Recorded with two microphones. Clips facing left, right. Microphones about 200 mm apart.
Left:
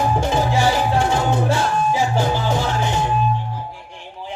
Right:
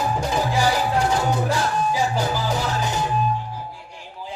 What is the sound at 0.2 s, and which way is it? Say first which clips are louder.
Music: left 3 dB; 25° left (ahead or behind).